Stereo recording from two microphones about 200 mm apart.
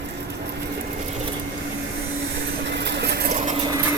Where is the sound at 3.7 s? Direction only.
15° right (ahead or behind).